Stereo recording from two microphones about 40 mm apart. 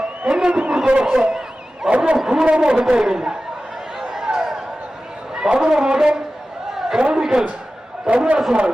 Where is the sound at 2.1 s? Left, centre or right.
Centre.